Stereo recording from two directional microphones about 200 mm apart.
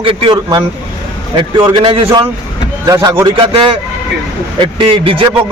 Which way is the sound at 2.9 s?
15° right (ahead or behind).